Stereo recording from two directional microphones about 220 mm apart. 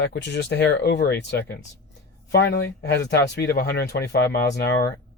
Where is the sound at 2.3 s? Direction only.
50° left (ahead or behind).